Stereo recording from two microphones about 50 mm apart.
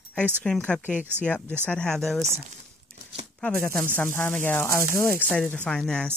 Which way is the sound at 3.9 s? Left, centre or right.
Left.